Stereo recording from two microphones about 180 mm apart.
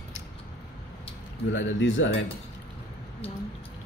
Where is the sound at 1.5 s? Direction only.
90° left.